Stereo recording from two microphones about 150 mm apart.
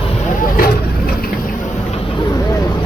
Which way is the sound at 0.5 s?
80° left.